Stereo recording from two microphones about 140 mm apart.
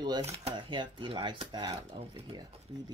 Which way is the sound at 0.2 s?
50° right (ahead or behind).